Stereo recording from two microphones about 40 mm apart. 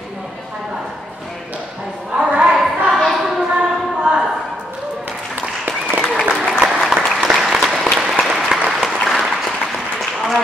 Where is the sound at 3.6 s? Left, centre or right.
Centre.